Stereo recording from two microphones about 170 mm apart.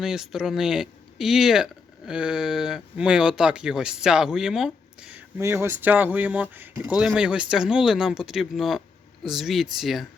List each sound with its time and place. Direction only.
0.0 s speech: 5° right (ahead or behind)